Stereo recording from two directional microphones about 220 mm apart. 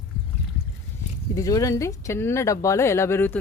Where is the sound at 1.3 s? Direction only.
15° left (ahead or behind).